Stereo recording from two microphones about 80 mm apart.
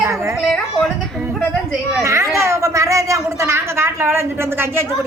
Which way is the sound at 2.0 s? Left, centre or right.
Right.